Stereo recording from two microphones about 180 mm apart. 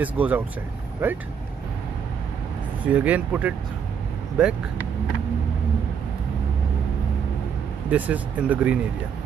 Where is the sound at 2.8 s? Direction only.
10° right (ahead or behind).